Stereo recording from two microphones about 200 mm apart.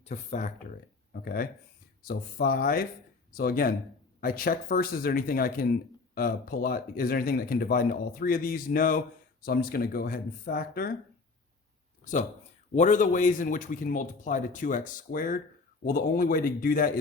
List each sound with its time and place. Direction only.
0.0 s a man's voice: 35° left (ahead or behind)
12.0 s a man's voice: 35° left (ahead or behind)